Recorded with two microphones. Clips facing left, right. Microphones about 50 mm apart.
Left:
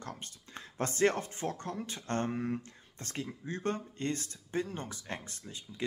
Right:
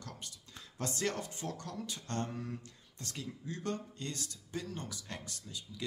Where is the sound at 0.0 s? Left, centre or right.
Left.